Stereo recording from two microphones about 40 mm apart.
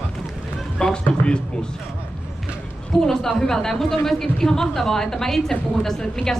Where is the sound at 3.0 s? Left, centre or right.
Centre.